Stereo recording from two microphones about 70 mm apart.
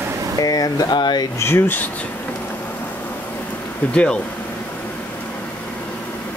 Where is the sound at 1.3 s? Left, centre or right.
Left.